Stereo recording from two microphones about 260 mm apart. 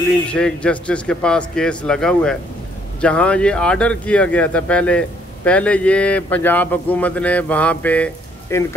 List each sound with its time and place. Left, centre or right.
0.3 s speech: centre